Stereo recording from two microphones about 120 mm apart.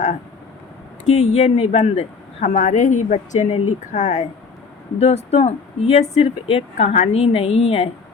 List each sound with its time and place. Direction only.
1.0 s speech: 70° left (ahead or behind); by 4.3 s 90° left
4.9 s speech: 60° left (ahead or behind)